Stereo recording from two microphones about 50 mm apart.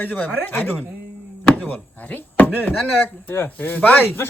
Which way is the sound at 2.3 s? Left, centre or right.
Left.